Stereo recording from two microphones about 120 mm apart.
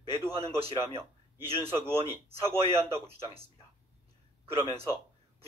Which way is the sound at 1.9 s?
55° right (ahead or behind).